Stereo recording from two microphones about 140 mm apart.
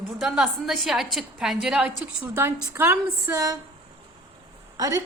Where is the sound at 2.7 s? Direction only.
20° right (ahead or behind).